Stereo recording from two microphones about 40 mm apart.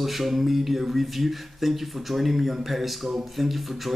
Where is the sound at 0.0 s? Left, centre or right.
Centre.